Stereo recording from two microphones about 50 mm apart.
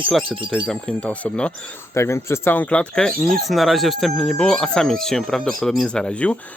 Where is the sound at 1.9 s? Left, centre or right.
Left.